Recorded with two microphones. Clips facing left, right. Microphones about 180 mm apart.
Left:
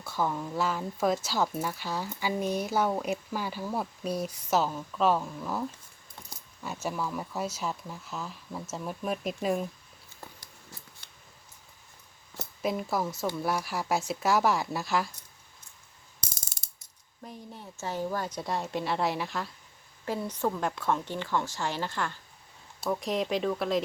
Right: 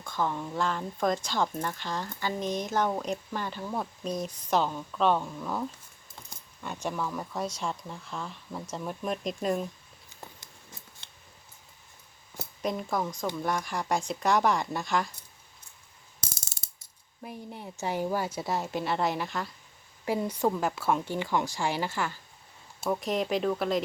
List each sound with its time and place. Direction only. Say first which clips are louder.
0.0 s speech: even; 10° left (ahead or behind)
6.8 s speech: even; 5° left (ahead or behind)
11.0 s scissors: right 1 dB; 25° right (ahead or behind)
12.6 s speech: left 1 dB; 5° left (ahead or behind)
17.2 s speech: right 3 dB; 15° right (ahead or behind); by 19.5 s centre (ahead or behind)
20.1 s speech: right 3 dB; 10° right (ahead or behind)